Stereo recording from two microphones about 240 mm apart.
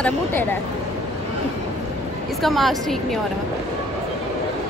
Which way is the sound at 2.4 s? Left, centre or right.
Centre.